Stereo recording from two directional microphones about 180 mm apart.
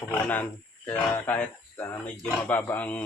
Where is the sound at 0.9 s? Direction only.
10° left (ahead or behind).